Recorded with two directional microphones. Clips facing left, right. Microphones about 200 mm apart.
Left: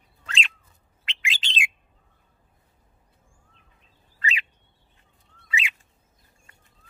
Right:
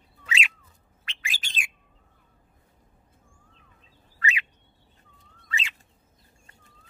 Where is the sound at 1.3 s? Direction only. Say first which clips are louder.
Left 5 dB; 25° left (ahead or behind).